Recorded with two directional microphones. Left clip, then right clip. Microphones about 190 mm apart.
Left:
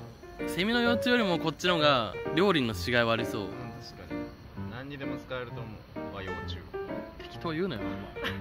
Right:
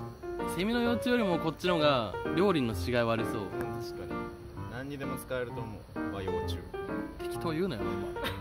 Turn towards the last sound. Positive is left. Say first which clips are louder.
# even
turn(degrees=-15)  # may be behind; listen again after turning